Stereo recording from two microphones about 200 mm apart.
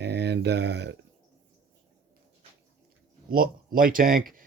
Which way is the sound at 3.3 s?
45° right (ahead or behind).